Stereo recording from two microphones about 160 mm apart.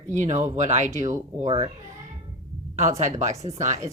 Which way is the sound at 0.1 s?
50° right (ahead or behind).